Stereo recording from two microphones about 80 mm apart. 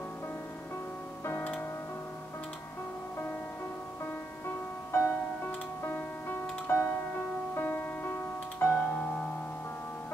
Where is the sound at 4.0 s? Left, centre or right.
Left.